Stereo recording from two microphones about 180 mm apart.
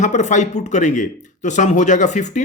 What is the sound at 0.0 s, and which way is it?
A man's voice, 40° left (ahead or behind).